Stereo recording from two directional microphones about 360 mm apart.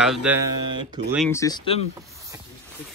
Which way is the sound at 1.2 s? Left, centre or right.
Centre.